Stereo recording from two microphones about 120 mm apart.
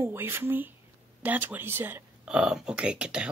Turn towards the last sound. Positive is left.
turn(degrees=-10)  # may be behind; listen again after turning